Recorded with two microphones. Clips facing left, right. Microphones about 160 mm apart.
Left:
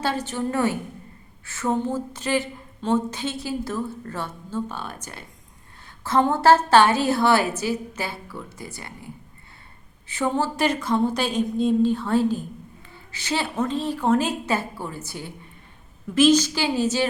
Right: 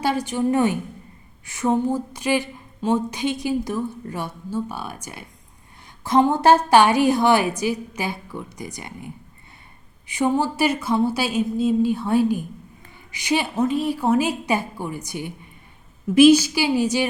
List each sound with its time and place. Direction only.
0.0 s a woman's voice: 15° right (ahead or behind)
10.1 s a woman's voice: 15° right (ahead or behind)